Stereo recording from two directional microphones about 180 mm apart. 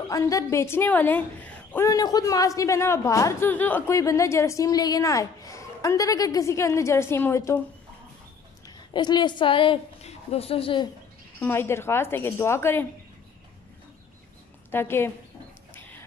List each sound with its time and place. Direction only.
0.1 s a woman's voice: 20° left (ahead or behind)
8.6 s a woman's voice: 25° left (ahead or behind)
11.3 s a woman's voice: 10° left (ahead or behind)
14.7 s a woman's voice: 10° left (ahead or behind)
15.7 s printer: 10° left (ahead or behind)